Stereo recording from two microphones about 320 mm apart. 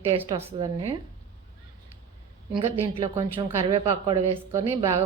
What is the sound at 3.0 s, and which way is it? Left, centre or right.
A woman's voice, centre.